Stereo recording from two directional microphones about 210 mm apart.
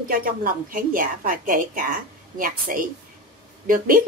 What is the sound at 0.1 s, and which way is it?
A woman's voice, 40° right (ahead or behind).